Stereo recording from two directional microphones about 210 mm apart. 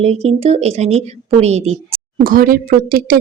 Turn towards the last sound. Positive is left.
turn(degrees=-40)  # may be behind; listen again after turning